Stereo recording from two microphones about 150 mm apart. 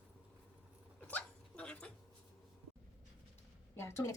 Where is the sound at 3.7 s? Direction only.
15° left (ahead or behind).